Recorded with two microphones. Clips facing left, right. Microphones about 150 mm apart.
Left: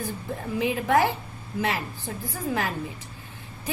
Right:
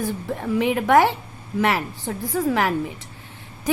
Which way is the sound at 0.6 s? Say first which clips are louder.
Right 5 dB; 90° right.